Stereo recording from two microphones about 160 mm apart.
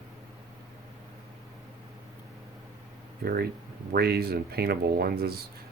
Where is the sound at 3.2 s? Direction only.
70° right (ahead or behind).